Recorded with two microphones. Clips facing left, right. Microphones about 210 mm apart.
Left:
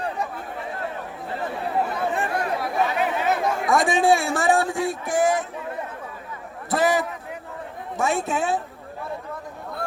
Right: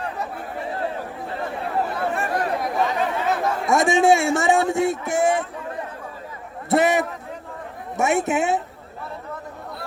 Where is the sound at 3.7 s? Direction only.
20° right (ahead or behind).